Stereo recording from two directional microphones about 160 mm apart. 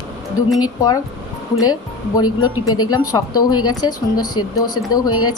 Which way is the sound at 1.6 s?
25° left (ahead or behind).